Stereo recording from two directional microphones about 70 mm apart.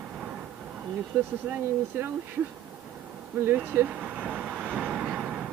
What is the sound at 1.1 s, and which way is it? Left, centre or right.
Speech, right.